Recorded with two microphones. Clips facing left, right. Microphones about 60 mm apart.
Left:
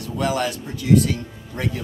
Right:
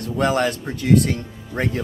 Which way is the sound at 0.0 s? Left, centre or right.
Right.